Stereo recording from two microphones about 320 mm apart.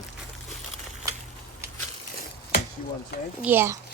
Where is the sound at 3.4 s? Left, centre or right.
Centre.